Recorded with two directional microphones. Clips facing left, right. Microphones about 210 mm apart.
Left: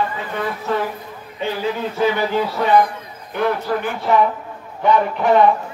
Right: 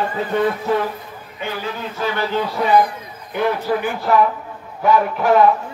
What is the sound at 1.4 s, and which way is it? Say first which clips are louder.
Speech: left 4 dB; 30° left (ahead or behind).